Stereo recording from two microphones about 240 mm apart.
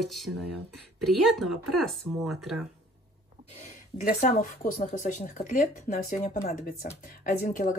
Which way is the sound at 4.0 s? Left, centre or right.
Left.